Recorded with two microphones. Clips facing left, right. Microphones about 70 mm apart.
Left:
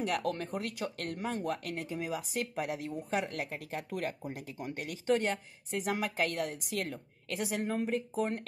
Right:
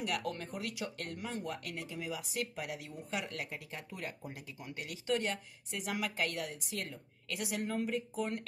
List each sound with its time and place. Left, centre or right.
0.2 s speech: left
3.7 s speech: left
7.3 s a woman's voice: left